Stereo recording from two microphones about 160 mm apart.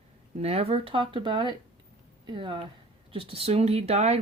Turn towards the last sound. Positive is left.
turn(degrees=-45)  # may be behind; listen again after turning